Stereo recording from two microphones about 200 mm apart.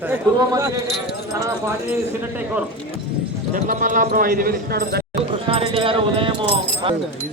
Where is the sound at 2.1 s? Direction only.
10° right (ahead or behind).